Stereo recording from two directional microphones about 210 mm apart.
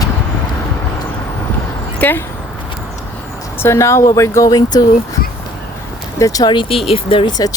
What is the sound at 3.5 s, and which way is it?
Speech, 15° left (ahead or behind).